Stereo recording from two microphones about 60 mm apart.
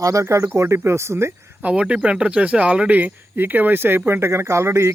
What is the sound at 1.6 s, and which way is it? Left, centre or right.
Speech, centre.